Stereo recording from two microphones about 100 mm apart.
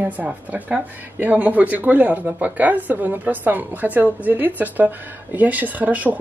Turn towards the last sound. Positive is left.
turn(degrees=-15)  # may be behind; listen again after turning